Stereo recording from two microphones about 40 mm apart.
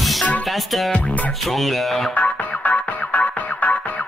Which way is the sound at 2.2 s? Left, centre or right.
Left.